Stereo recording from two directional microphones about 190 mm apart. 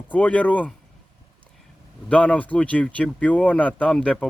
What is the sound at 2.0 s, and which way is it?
Speech, 5° left (ahead or behind).